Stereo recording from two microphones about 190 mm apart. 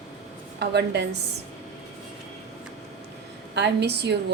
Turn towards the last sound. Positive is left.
turn(degrees=-60)  # may be behind; listen again after turning